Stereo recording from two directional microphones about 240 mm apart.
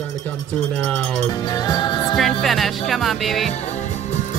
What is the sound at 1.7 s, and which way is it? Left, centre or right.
Music, centre.